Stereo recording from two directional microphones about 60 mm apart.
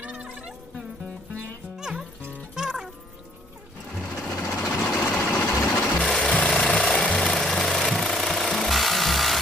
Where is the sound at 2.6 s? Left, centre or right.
Centre.